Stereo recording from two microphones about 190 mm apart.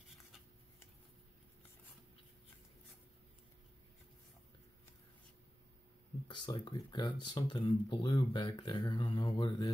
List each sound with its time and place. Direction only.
6.2 s speech: 25° left (ahead or behind)